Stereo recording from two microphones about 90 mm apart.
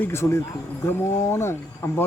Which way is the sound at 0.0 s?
30° left (ahead or behind).